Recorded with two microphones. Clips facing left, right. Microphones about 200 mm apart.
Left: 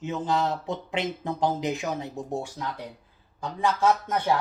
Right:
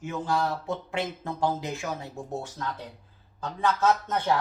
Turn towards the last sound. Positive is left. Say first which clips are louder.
# left 1 dB
turn(degrees=10)  # may be behind; listen again after turning